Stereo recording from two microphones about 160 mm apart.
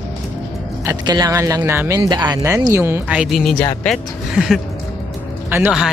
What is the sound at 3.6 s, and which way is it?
Speech, 15° left (ahead or behind).